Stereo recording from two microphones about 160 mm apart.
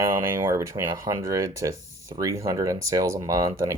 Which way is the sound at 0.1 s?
15° right (ahead or behind).